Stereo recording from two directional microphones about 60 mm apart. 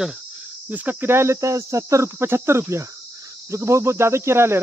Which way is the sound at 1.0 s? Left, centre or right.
Right.